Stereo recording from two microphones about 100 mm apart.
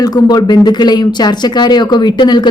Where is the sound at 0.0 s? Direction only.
40° left (ahead or behind).